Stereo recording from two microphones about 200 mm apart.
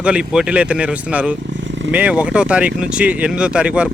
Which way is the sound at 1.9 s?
5° right (ahead or behind).